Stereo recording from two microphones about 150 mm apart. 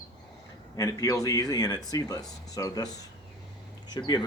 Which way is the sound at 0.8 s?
25° left (ahead or behind).